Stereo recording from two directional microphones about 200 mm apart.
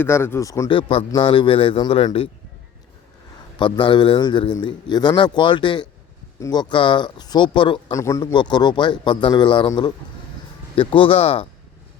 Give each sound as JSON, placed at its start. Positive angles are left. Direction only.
{"t": 0.0, "sound": "speech", "side_deg": 10}
{"t": 3.6, "sound": "speech", "side_deg": 25}